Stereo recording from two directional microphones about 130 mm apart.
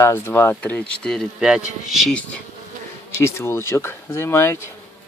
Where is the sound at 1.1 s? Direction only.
Centre (ahead or behind).